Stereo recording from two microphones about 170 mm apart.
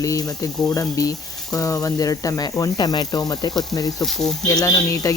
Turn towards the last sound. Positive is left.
turn(degrees=20)  # may be behind; listen again after turning